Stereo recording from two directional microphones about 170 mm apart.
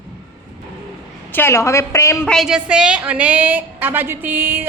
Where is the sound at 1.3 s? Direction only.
15° left (ahead or behind).